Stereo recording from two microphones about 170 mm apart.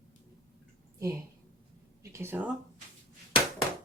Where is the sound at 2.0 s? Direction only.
15° right (ahead or behind).